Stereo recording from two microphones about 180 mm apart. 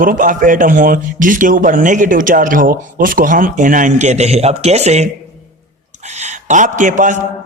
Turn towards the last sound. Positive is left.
turn(degrees=-45)  # may be behind; listen again after turning